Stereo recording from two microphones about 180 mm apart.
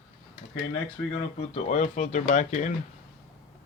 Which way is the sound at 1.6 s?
40° left (ahead or behind).